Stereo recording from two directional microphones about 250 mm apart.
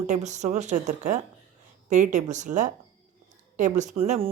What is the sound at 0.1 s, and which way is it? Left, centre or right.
Speech, right.